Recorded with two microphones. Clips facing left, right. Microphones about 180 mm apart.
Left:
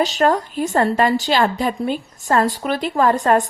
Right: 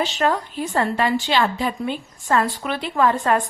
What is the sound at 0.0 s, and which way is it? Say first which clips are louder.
A woman's voice: left 4 dB; 40° left (ahead or behind).